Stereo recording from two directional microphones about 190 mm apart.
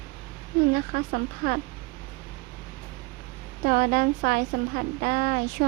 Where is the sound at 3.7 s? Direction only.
50° right (ahead or behind).